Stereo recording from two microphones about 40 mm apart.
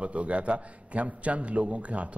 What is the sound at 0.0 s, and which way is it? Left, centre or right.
A man's voice, right.